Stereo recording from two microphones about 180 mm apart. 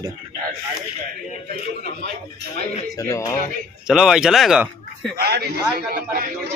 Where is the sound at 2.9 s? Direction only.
15° left (ahead or behind).